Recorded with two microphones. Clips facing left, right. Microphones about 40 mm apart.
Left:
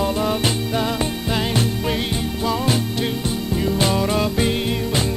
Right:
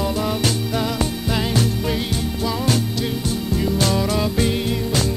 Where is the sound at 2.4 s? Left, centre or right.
Centre.